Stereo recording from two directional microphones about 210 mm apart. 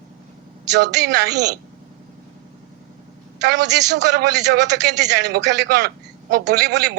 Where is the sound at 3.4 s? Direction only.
55° right (ahead or behind).